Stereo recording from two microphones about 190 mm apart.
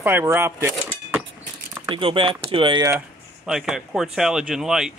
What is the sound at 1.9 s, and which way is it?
Speech, 25° right (ahead or behind).